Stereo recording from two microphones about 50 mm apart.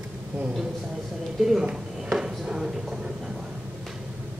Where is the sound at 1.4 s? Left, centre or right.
Centre.